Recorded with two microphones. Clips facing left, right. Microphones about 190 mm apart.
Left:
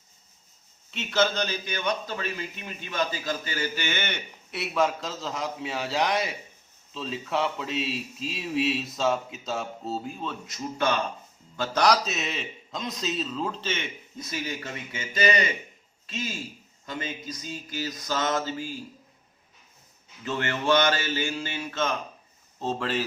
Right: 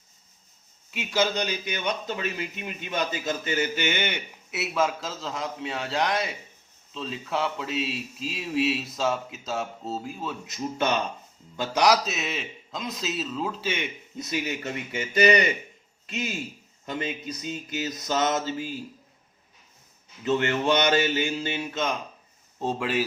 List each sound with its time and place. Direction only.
0.9 s a man's voice: 10° right (ahead or behind)
10.4 s mantra: 20° right (ahead or behind)
11.5 s a man's voice: 15° right (ahead or behind)
14.3 s mantra: 20° right (ahead or behind)
15.1 s speech: 25° left (ahead or behind)
16.1 s mantra: 25° right (ahead or behind)
17.7 s mantra: 25° right (ahead or behind)
20.2 s mantra: 20° right (ahead or behind)
22.6 s a man's voice: 10° right (ahead or behind)